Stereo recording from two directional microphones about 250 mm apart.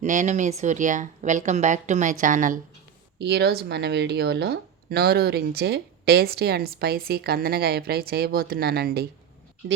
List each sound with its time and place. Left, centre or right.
0.0 s speech: right